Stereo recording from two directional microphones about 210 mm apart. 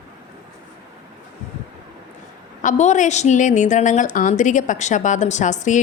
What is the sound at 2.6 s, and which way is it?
A woman's voice, 35° left (ahead or behind).